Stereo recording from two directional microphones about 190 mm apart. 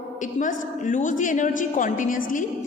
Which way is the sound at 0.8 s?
45° left (ahead or behind).